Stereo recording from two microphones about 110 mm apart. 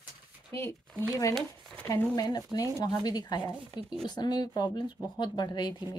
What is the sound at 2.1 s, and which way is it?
Speech, 40° left (ahead or behind).